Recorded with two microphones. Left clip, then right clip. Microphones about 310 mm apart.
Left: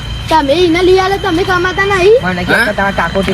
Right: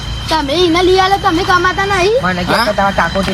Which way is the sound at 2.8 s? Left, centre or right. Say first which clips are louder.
Right 1 dB; right.